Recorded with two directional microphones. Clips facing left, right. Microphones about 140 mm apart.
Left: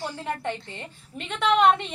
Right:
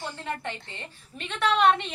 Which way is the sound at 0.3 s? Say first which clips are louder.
Left 4 dB; 15° left (ahead or behind).